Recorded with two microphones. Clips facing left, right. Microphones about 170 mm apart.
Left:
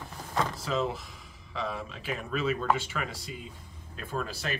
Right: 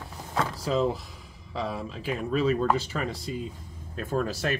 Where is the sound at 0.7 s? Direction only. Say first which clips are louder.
Right 5 dB; 35° right (ahead or behind).